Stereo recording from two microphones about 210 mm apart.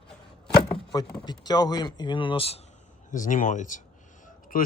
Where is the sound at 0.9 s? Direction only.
20° left (ahead or behind).